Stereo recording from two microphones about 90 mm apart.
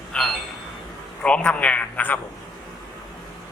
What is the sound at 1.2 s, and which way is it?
Speech, 15° left (ahead or behind).